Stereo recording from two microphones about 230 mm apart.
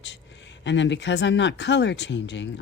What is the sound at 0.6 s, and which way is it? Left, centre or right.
Speech, left.